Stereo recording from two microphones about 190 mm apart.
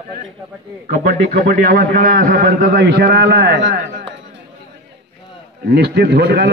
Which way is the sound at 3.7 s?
50° right (ahead or behind).